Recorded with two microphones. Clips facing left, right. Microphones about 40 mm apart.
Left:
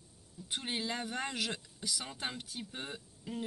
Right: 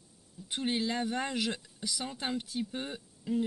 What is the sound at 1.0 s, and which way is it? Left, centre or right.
Speech, centre.